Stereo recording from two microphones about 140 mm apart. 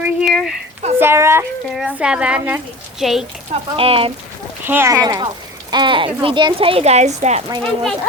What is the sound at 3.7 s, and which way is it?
Speech, 40° right (ahead or behind).